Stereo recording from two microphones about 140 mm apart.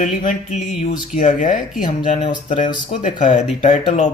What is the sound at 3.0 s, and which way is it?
Speech, 65° left (ahead or behind).